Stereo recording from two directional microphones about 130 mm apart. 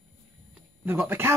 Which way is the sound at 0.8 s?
15° right (ahead or behind).